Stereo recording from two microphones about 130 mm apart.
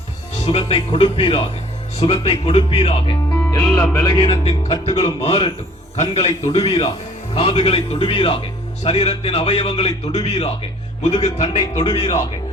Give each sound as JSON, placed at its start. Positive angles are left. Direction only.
{"t": 0.7, "sound": "a man's voice", "side_deg": 45}
{"t": 3.7, "sound": "speech", "side_deg": 20}
{"t": 4.0, "sound": "a man's voice", "side_deg": 40}